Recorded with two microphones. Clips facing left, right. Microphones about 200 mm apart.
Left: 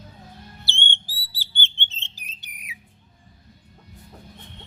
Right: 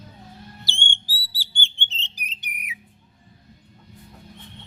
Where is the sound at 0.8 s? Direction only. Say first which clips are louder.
Even; 15° right (ahead or behind).